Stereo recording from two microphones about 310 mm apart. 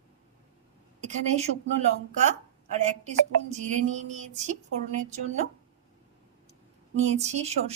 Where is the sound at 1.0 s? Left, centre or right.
Right.